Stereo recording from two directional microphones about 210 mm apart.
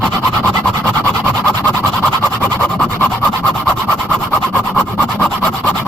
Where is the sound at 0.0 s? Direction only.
Centre (ahead or behind).